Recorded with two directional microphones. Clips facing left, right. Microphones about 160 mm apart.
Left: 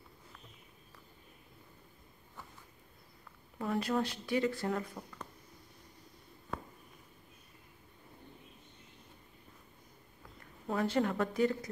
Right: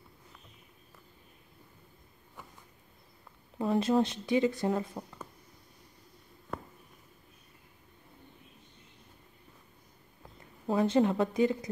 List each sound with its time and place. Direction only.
3.5 s speech: 25° right (ahead or behind)
10.7 s speech: 20° right (ahead or behind)